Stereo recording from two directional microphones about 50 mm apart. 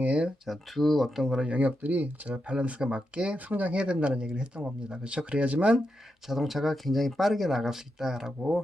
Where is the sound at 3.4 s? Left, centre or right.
Right.